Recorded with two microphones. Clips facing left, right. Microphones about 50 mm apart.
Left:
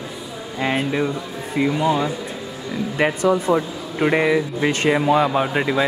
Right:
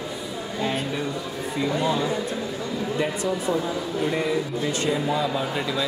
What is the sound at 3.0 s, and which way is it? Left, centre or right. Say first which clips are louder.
Speech: left 9 dB; left.